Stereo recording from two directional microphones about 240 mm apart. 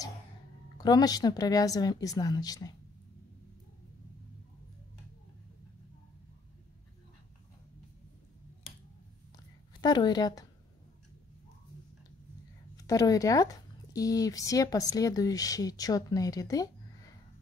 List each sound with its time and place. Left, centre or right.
0.7 s speech: centre
9.8 s speech: centre
12.7 s speech: centre